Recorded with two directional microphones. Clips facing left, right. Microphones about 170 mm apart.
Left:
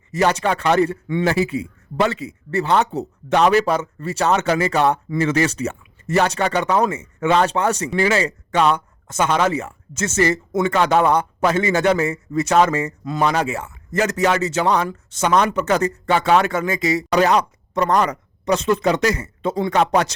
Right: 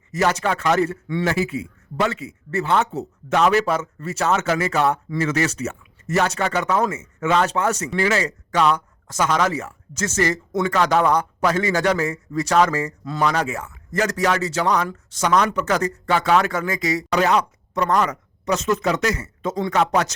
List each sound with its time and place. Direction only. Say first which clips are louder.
0.1 s a man's voice: left 2 dB; 30° left (ahead or behind)